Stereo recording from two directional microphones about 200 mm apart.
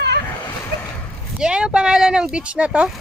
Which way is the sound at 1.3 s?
5° right (ahead or behind).